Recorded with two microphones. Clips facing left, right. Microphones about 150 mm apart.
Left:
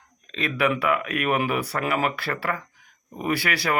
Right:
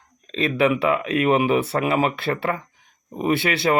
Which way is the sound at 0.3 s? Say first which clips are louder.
Right 5 dB; 25° right (ahead or behind).